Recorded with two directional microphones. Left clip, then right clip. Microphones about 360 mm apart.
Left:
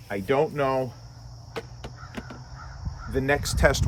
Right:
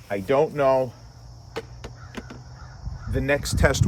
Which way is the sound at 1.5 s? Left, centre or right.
Centre.